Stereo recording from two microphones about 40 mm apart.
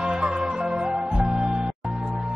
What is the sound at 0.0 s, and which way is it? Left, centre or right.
Music, right.